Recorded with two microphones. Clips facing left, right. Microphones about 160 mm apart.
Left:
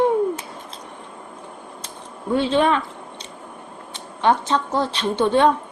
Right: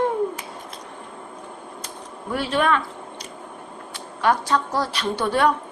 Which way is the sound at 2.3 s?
25° left (ahead or behind).